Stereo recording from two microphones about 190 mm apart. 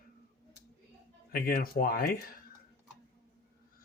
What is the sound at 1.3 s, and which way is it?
Speech, 50° left (ahead or behind).